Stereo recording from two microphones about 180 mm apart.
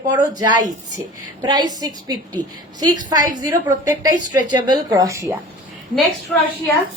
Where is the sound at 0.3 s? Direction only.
25° right (ahead or behind).